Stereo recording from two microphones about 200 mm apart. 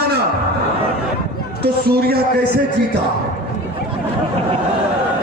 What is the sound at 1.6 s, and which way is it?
Speech, 50° right (ahead or behind).